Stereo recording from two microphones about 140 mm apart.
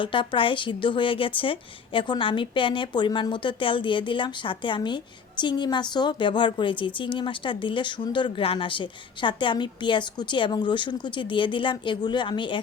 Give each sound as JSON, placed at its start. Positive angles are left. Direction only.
{"t": 0.0, "sound": "a woman's voice", "side_deg": 35}